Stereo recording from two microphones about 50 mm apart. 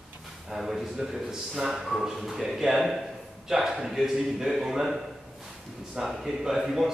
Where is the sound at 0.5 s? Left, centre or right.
Centre.